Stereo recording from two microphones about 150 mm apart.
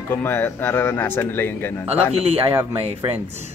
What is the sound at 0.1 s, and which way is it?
Speech, 15° left (ahead or behind).